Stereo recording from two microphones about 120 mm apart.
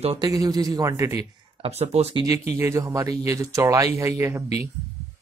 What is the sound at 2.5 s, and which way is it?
Speech, 20° right (ahead or behind).